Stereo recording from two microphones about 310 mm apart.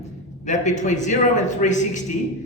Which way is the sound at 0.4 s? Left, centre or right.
Left.